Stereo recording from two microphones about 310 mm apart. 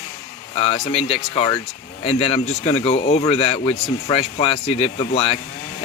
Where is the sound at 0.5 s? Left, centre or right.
Centre.